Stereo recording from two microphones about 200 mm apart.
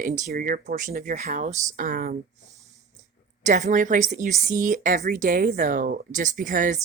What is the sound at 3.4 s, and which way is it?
A woman's voice, 35° right (ahead or behind).